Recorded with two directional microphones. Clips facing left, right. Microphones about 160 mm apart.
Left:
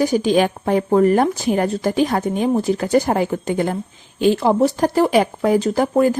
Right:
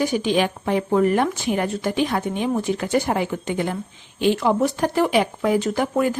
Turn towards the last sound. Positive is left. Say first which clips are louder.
# left 5 dB
turn(degrees=35)  # may be behind; listen again after turning